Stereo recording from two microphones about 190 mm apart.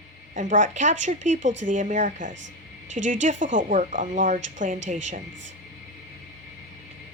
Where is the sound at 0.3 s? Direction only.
40° right (ahead or behind).